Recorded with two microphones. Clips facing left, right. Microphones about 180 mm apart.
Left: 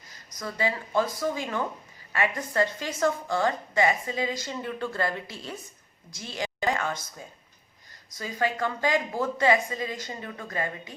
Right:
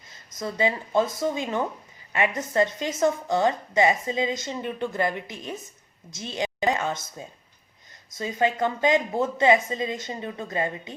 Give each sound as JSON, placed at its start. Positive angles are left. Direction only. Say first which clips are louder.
{"t": 0.1, "sound": "a woman's voice", "louder": "right 4 dB", "side_deg": -25}